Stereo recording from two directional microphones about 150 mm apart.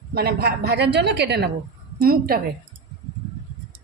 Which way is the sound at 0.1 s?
90° right.